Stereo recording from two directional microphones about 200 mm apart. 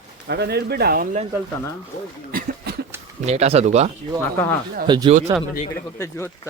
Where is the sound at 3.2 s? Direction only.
30° right (ahead or behind).